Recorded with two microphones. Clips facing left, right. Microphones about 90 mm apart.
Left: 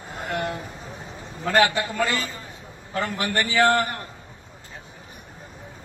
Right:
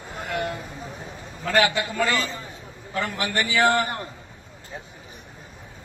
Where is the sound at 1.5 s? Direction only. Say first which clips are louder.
Left 1 dB; 35° left (ahead or behind).